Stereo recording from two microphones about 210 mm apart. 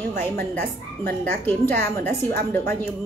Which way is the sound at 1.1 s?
10° left (ahead or behind).